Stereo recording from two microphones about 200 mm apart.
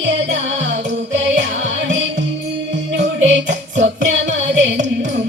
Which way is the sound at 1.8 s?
65° right (ahead or behind).